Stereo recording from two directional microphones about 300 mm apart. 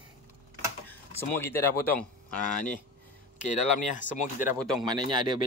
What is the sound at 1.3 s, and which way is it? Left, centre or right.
Speech, centre.